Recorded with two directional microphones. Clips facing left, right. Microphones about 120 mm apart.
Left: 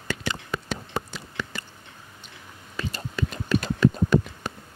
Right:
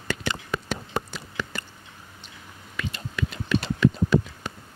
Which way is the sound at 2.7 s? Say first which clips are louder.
Left 1 dB; 35° left (ahead or behind).